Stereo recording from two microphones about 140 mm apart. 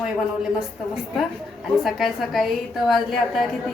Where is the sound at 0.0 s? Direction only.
5° right (ahead or behind).